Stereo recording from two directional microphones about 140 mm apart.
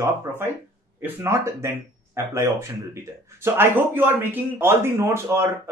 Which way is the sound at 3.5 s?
15° right (ahead or behind).